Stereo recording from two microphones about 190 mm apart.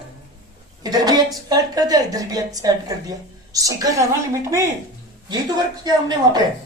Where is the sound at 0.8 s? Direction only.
20° right (ahead or behind).